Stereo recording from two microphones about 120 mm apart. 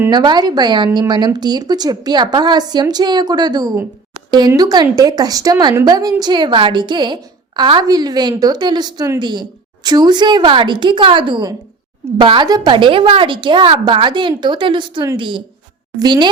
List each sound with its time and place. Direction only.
0.1 s a woman's voice: 35° right (ahead or behind)